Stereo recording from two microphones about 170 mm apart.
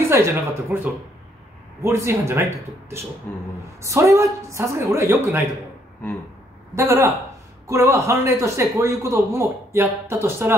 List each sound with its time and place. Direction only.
0.0 s speech: 15° right (ahead or behind)
6.0 s speech: 10° left (ahead or behind)
6.7 s speech: 15° right (ahead or behind)